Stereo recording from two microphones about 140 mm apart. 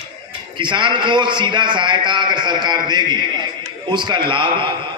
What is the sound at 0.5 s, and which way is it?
A man's voice, 35° right (ahead or behind).